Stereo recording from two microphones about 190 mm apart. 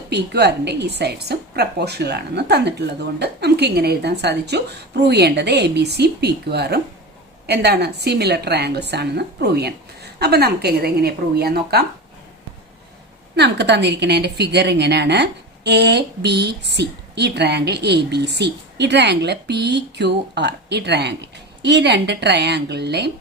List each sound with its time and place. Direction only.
0.1 s speech: 60° right (ahead or behind)
13.3 s speech: 65° right (ahead or behind)